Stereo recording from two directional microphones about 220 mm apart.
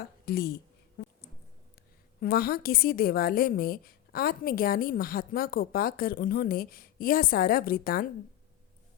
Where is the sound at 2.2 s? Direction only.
45° left (ahead or behind).